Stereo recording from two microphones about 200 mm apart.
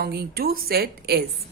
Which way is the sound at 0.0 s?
50° right (ahead or behind).